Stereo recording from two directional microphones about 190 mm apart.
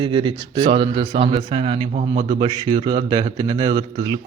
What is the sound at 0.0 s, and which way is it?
Speech, 25° right (ahead or behind).